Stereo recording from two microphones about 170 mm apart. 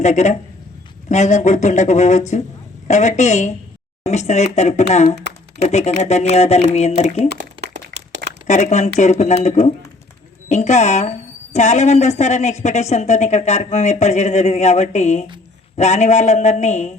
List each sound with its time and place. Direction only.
0.0 s speech: 45° left (ahead or behind)
7.3 s crumpling: 75° right (ahead or behind)
8.4 s speech: 45° left (ahead or behind)